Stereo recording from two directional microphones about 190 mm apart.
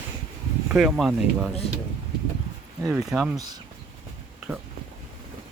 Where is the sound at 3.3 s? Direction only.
20° right (ahead or behind).